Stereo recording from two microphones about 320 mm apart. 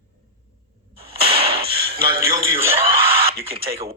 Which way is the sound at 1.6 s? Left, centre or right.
Right.